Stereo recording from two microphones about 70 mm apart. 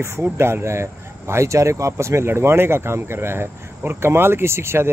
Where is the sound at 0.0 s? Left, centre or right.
Right.